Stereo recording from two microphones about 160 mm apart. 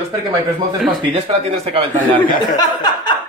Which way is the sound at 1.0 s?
35° right (ahead or behind).